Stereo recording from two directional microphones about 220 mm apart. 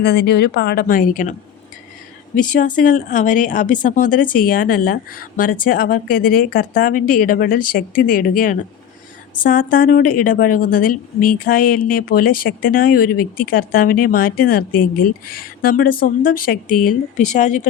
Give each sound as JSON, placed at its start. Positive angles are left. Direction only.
{"t": 0.0, "sound": "a woman's voice", "side_deg": 50}